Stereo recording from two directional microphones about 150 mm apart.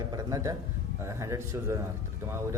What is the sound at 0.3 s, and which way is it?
Speech, 25° right (ahead or behind).